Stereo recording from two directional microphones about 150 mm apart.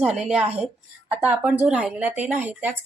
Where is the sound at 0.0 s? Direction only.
5° right (ahead or behind).